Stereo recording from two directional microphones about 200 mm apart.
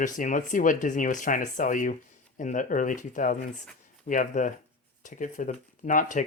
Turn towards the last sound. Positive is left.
turn(degrees=40)  # may be behind; listen again after turning